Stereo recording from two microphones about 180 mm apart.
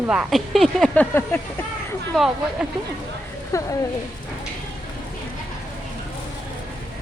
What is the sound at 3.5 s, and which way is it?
Speech, 15° left (ahead or behind).